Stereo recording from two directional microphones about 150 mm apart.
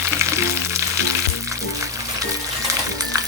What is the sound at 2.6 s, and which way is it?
Music, 25° right (ahead or behind).